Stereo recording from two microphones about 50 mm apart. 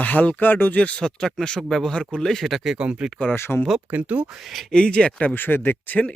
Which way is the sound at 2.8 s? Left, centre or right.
Right.